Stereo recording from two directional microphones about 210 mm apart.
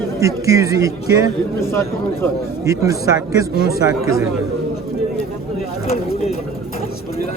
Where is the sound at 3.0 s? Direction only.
45° left (ahead or behind).